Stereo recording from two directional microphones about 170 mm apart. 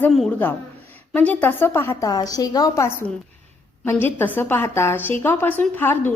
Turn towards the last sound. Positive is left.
turn(degrees=10)  # may be behind; listen again after turning